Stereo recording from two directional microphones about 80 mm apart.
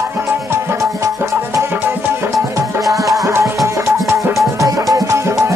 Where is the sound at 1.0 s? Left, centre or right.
Right.